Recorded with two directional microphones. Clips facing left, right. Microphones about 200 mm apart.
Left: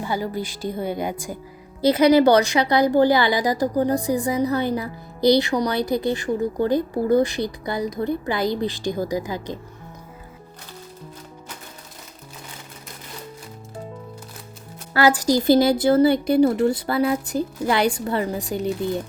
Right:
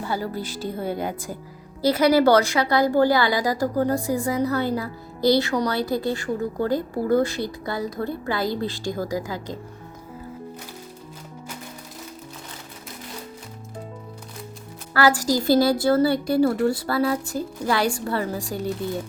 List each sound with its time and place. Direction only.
0.0 s a woman's voice: 15° left (ahead or behind)
14.9 s a woman's voice: 20° left (ahead or behind)